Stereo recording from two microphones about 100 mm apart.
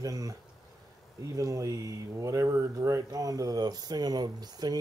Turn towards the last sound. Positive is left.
turn(degrees=-40)  # may be behind; listen again after turning